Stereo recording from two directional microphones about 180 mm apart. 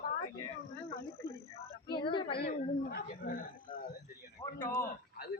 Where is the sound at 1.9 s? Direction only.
25° left (ahead or behind).